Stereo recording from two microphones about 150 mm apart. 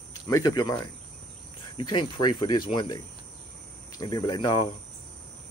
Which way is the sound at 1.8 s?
35° left (ahead or behind).